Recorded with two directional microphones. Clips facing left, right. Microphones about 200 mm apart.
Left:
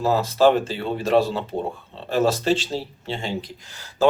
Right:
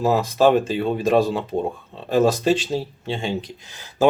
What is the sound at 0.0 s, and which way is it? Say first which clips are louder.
Speech: right 1 dB; 15° right (ahead or behind).